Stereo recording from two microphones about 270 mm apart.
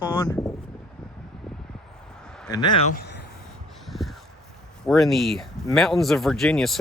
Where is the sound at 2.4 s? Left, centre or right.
Centre.